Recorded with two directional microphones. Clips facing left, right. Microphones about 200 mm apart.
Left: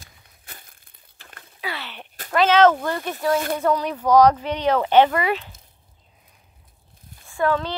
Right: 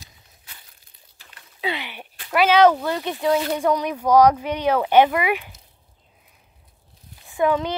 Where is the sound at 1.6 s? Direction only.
20° right (ahead or behind).